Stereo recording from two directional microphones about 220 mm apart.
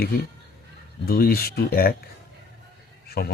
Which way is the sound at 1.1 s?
45° left (ahead or behind).